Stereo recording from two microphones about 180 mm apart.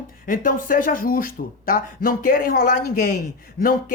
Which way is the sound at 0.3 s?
50° left (ahead or behind).